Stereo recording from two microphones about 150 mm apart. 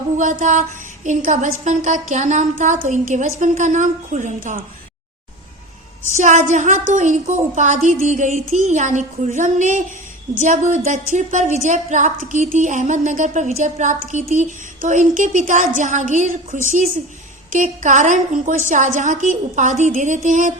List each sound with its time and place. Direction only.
0.2 s a woman's voice: 55° right (ahead or behind)
6.1 s a woman's voice: 50° right (ahead or behind)